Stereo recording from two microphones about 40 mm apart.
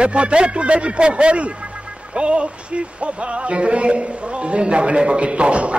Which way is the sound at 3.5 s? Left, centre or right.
Right.